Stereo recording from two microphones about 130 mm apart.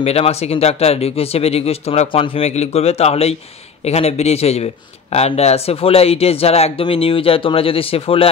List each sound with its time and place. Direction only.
0.0 s speech: 55° left (ahead or behind)